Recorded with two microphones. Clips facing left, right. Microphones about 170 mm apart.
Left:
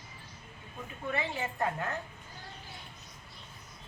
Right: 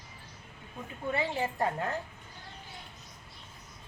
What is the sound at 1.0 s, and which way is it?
Speech, 30° right (ahead or behind).